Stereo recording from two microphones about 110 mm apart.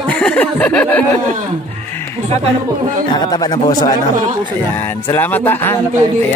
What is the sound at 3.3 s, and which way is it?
Speech, 40° left (ahead or behind).